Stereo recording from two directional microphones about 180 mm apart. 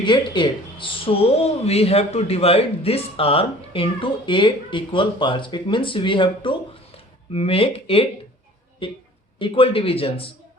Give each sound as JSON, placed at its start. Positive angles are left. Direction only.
{"t": 0.0, "sound": "speech", "side_deg": 25}